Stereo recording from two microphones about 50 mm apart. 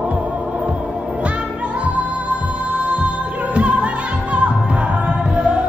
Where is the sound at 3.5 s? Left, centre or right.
Right.